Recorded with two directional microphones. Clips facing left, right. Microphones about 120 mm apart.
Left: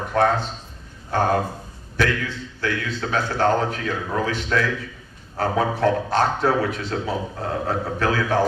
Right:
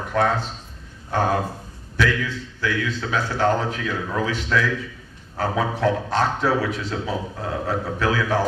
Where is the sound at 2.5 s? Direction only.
45° left (ahead or behind).